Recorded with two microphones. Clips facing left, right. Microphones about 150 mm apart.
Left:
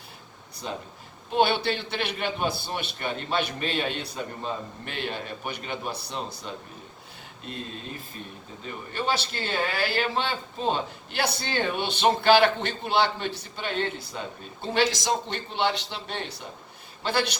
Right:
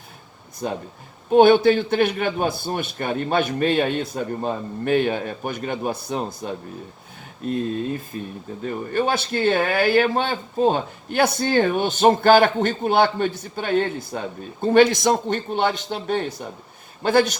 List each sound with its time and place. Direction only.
0.6 s speech: 50° right (ahead or behind)
8.6 s speech: 50° right (ahead or behind)